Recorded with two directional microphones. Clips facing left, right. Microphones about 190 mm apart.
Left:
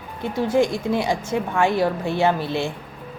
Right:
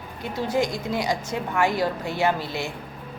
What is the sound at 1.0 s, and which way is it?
Speech, 20° left (ahead or behind).